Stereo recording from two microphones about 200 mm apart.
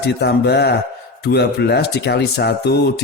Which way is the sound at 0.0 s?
55° left (ahead or behind).